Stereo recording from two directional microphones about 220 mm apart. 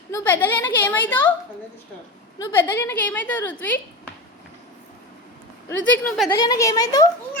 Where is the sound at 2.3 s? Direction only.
15° left (ahead or behind).